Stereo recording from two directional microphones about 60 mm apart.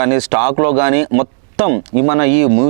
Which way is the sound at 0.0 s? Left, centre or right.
Right.